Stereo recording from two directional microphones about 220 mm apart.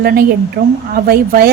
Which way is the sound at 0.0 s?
45° right (ahead or behind).